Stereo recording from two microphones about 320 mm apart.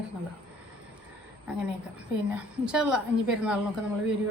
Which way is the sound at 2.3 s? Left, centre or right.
Centre.